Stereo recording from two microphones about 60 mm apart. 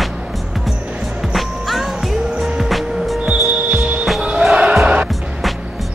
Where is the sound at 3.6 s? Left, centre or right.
Right.